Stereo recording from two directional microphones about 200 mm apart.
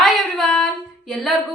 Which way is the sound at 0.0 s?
Centre (ahead or behind).